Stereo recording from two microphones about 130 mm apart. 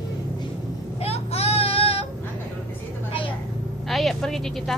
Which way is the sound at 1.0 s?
50° left (ahead or behind).